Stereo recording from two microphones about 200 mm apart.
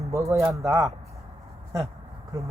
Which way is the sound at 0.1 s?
15° right (ahead or behind).